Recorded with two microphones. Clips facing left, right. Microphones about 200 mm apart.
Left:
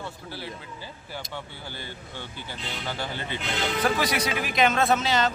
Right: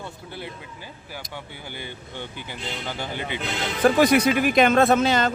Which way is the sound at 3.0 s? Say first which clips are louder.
Right 2 dB; 15° right (ahead or behind).